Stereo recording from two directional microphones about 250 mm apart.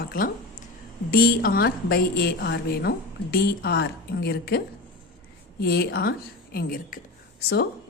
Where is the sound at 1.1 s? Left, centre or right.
Left.